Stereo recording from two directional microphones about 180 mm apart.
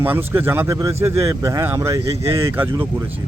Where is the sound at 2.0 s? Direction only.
30° right (ahead or behind).